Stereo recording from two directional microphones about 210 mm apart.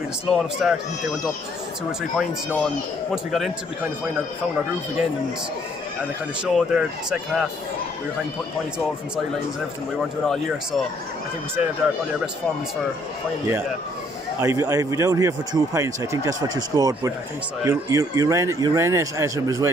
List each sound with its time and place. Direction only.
0.3 s speech: centre (ahead or behind)
1.9 s speech: centre (ahead or behind)
6.4 s speech: 5° right (ahead or behind)
10.2 s speech: centre (ahead or behind)
14.4 s speech: 15° right (ahead or behind)